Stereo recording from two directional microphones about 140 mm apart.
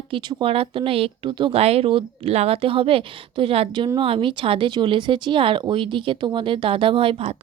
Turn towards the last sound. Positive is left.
turn(degrees=-40)  # may be behind; listen again after turning